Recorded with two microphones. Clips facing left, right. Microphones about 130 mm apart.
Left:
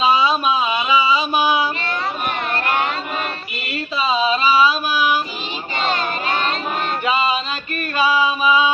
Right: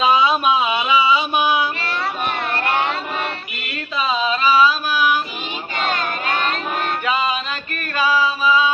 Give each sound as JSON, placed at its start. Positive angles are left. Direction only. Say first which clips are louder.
{"t": 0.0, "sound": "a sound", "louder": "right 1 dB", "side_deg": 0}
{"t": 2.5, "sound": "cat", "louder": "even", "side_deg": -10}
{"t": 3.7, "sound": "a sound", "louder": "left 2 dB", "side_deg": 5}
{"t": 5.7, "sound": "child singing", "louder": "left 1 dB", "side_deg": 0}
{"t": 7.0, "sound": "music", "louder": "left 3 dB", "side_deg": 5}
{"t": 7.8, "sound": "chant", "louder": "left 1 dB", "side_deg": 10}